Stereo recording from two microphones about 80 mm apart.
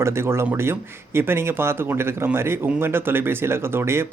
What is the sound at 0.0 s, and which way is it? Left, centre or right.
Speech, right.